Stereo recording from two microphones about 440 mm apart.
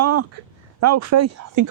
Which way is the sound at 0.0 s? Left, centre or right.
Right.